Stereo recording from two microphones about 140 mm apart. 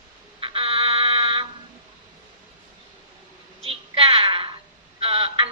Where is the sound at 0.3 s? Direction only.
40° right (ahead or behind).